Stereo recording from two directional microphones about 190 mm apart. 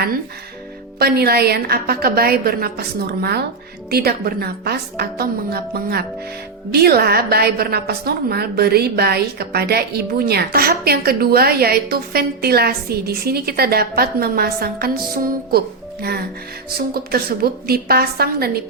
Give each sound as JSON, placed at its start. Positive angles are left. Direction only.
{"t": 0.9, "sound": "a woman's voice", "side_deg": -55}